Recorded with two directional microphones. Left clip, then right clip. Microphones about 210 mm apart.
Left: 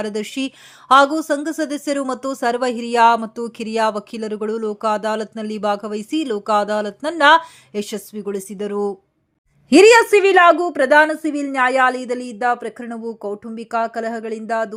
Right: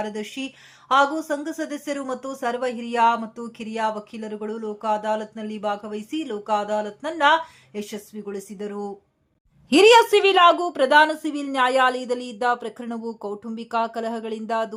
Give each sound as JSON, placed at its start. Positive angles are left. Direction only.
{"t": 0.0, "sound": "speech", "side_deg": 30}
{"t": 9.6, "sound": "a woman's voice", "side_deg": 15}